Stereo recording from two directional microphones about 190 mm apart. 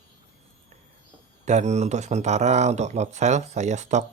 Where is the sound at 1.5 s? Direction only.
40° right (ahead or behind).